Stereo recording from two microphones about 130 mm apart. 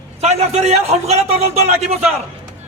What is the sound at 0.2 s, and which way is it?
A man's voice, 55° right (ahead or behind).